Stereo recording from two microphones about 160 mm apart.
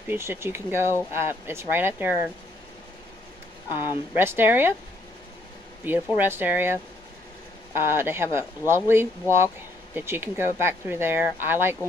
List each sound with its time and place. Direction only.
0.1 s speech: 15° right (ahead or behind)
3.6 s speech: 25° left (ahead or behind)
4.1 s speech: 15° right (ahead or behind)
5.9 s speech: 10° right (ahead or behind)